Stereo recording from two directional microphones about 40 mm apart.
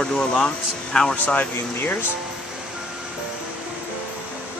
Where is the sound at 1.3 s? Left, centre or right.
Left.